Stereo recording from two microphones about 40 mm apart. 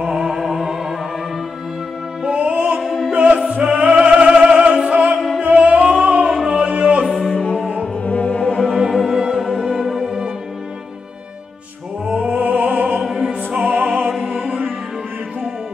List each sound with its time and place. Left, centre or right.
0.1 s music: centre
2.2 s music: right
5.8 s music: centre
6.7 s music: right
7.1 s music: centre
7.8 s music: left
8.7 s music: centre
9.8 s music: centre
12.1 s music: right
13.0 s opera: centre
13.3 s music: right